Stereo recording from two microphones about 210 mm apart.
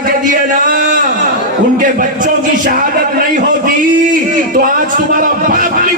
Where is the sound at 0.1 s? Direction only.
40° right (ahead or behind).